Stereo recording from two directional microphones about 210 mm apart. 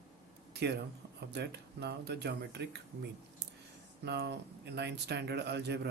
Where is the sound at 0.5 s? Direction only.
50° right (ahead or behind).